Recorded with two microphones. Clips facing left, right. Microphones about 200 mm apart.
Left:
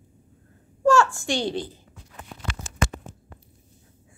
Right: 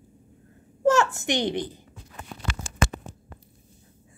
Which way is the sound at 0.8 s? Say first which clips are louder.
Left 1 dB; 20° right (ahead or behind).